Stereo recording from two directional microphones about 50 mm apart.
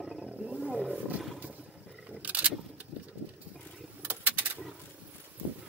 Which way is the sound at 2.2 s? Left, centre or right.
Right.